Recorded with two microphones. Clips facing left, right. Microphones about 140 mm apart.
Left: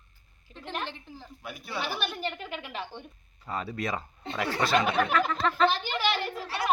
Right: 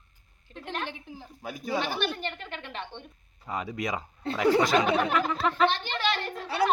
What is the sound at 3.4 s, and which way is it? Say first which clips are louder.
Speech: right 1 dB; 15° right (ahead or behind).